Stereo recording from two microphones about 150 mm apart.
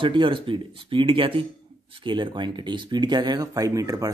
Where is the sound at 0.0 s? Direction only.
35° right (ahead or behind).